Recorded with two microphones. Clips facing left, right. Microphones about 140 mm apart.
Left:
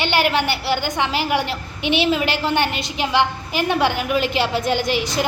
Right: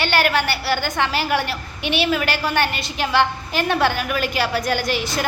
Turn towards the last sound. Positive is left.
turn(degrees=20)  # may be behind; listen again after turning